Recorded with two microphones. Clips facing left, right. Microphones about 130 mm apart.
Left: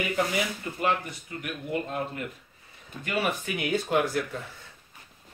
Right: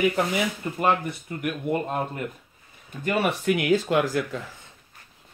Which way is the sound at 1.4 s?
50° right (ahead or behind).